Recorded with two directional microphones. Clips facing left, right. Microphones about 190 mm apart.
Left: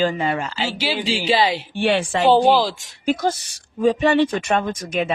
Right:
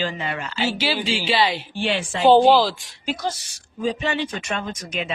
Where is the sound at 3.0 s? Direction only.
50° left (ahead or behind).